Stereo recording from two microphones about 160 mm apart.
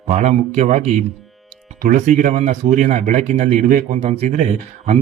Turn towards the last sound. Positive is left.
turn(degrees=-45)  # may be behind; listen again after turning